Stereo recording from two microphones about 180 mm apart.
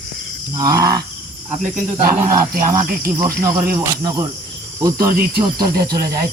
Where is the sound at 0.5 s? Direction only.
20° right (ahead or behind).